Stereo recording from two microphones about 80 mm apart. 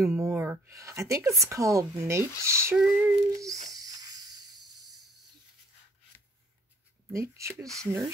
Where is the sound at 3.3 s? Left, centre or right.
Right.